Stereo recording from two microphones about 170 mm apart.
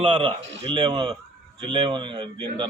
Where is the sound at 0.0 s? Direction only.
30° right (ahead or behind).